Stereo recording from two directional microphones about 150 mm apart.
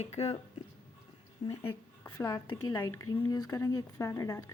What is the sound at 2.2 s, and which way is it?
Speech, 20° left (ahead or behind).